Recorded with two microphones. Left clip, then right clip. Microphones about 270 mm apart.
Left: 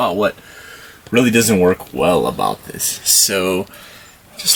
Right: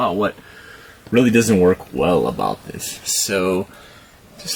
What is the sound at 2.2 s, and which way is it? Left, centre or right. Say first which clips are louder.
Speech: left 3 dB; right.